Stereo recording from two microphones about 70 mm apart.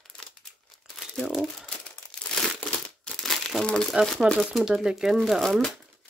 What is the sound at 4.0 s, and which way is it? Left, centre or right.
Speech, centre.